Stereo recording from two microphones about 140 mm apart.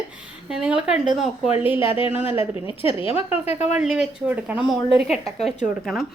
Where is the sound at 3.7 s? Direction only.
5° right (ahead or behind).